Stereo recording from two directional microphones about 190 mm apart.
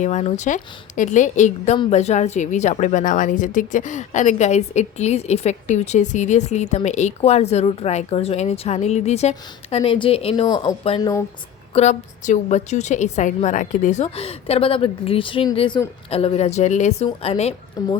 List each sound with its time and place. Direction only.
0.0 s a woman's voice: 40° left (ahead or behind)
17.8 s speech: 20° left (ahead or behind)